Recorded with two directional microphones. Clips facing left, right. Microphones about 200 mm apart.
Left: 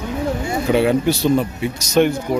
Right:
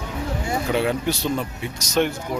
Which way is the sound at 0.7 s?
5° left (ahead or behind).